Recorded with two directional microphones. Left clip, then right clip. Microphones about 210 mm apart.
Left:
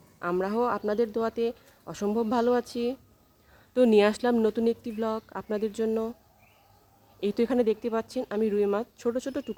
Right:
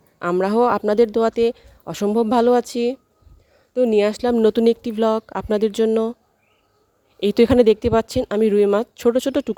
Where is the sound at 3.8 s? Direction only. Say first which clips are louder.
Right 4 dB; 15° right (ahead or behind); by 6.2 s 40° right (ahead or behind).